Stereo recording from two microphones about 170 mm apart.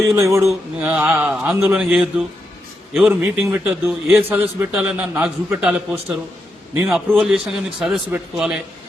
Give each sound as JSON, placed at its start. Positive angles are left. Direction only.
{"t": 0.0, "sound": "a man's voice", "side_deg": -15}
{"t": 6.8, "sound": "a man's voice", "side_deg": 0}